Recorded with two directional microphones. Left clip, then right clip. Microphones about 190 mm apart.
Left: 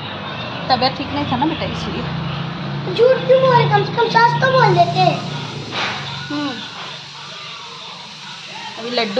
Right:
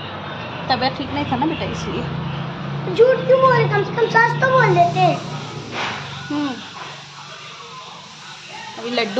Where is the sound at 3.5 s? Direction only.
15° right (ahead or behind).